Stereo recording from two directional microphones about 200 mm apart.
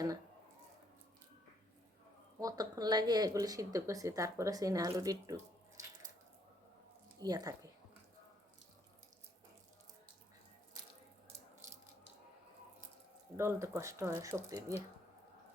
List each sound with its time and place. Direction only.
2.4 s speech: 20° right (ahead or behind)
7.2 s speech: 20° right (ahead or behind)
13.3 s speech: 15° right (ahead or behind)